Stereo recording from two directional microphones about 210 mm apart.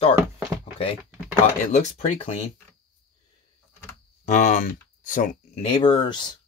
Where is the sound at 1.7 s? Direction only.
35° left (ahead or behind).